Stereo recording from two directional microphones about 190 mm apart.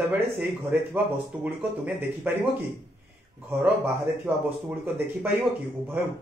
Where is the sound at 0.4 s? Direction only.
10° right (ahead or behind).